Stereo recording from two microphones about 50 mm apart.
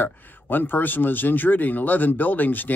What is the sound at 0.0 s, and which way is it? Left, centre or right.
Speech, left.